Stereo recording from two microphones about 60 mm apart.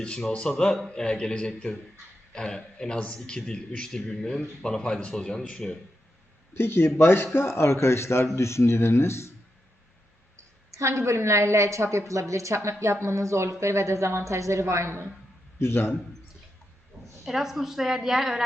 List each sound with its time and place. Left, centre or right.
0.0 s speech: centre
6.5 s speech: left
10.7 s speech: right
15.5 s a man's voice: left
17.2 s a woman's voice: centre